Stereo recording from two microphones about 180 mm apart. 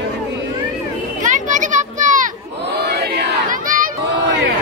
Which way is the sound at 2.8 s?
65° right (ahead or behind).